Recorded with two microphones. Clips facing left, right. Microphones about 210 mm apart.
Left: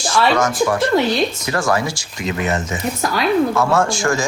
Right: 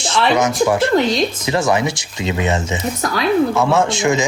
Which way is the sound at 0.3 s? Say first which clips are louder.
Right 2 dB; 20° right (ahead or behind).